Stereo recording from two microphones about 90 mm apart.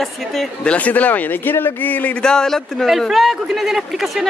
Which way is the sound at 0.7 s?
15° left (ahead or behind).